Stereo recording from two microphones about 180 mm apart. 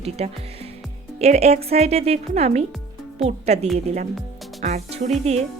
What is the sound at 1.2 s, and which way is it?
Speech, 35° right (ahead or behind).